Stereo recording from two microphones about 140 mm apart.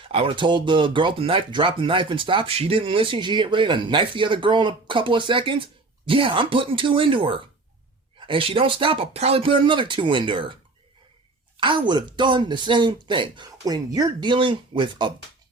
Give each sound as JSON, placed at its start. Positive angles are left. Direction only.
{"t": 0.0, "sound": "speech", "side_deg": -40}